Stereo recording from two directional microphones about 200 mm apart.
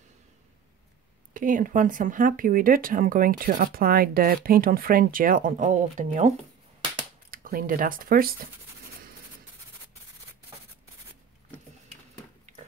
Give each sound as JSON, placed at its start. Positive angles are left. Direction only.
{"t": 1.3, "sound": "speech", "side_deg": -40}